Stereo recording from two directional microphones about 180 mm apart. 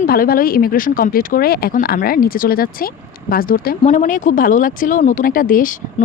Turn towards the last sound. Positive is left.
turn(degrees=50)  # may be behind; listen again after turning